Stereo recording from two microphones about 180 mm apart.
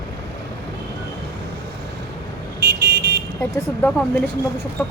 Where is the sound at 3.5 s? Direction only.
5° left (ahead or behind).